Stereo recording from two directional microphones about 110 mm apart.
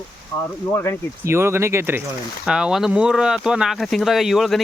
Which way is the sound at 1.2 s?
25° right (ahead or behind).